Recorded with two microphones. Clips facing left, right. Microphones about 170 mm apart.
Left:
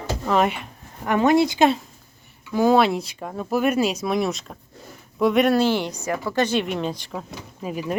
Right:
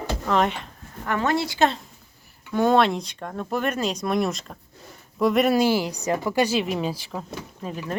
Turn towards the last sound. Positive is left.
turn(degrees=10)  # may be behind; listen again after turning